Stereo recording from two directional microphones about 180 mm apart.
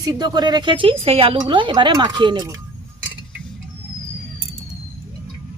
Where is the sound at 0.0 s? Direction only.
20° right (ahead or behind).